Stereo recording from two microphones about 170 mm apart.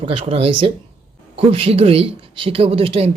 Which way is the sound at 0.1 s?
30° right (ahead or behind).